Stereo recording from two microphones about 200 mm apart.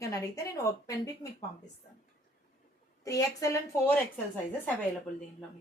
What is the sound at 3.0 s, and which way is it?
A woman's voice, 15° left (ahead or behind).